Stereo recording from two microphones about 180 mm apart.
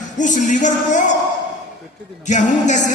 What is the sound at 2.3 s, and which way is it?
Speech, 40° left (ahead or behind).